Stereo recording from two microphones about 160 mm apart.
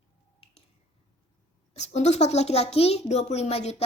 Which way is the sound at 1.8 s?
45° left (ahead or behind).